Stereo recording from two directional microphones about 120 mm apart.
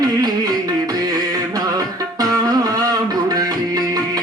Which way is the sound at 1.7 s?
30° right (ahead or behind).